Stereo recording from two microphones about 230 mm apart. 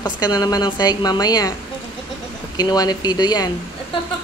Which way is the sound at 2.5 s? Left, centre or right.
Centre.